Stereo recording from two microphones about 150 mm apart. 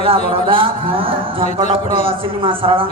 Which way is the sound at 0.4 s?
35° right (ahead or behind).